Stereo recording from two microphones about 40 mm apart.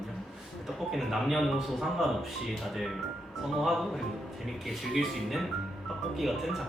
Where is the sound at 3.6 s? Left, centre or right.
Centre.